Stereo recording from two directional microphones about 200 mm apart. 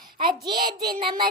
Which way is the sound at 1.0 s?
25° right (ahead or behind).